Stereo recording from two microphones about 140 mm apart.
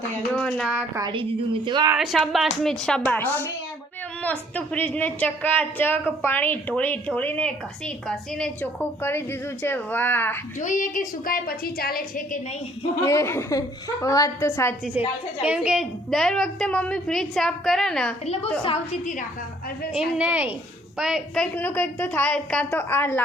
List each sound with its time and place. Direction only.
0.3 s a sound: 5° left (ahead or behind)
1.6 s a woman's voice: 35° right (ahead or behind)
2.0 s a woman's voice: centre (ahead or behind)
8.8 s a woman's voice: 15° left (ahead or behind)
10.6 s a woman's voice: 65° left (ahead or behind); by 12.4 s 85° left
13.1 s a woman's voice: 20° left (ahead or behind)
15.4 s a woman's voice: 5° right (ahead or behind)
19.9 s a woman's voice: 5° right (ahead or behind)
21.4 s a woman's voice: 10° left (ahead or behind)